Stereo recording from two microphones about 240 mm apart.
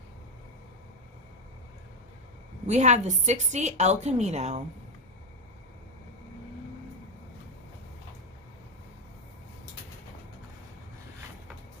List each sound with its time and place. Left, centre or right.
2.6 s a woman's voice: right